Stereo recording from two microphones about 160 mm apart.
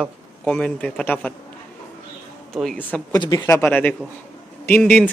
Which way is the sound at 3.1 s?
25° left (ahead or behind).